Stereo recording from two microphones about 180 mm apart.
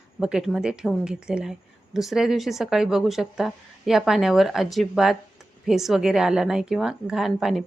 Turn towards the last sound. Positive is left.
turn(degrees=0)  # may be behind; listen again after turning